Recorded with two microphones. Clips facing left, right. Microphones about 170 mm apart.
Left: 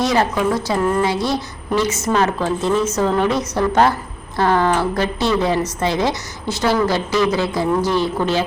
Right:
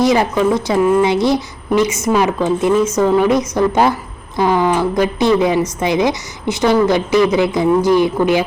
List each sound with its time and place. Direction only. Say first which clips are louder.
0.0 s a woman's voice: right 4 dB; 20° right (ahead or behind)